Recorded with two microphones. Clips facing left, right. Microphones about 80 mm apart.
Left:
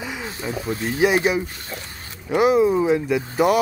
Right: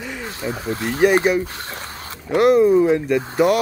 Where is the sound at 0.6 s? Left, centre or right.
Right.